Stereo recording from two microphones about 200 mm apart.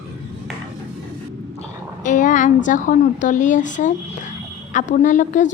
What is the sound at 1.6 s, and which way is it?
A woman's voice, 40° left (ahead or behind).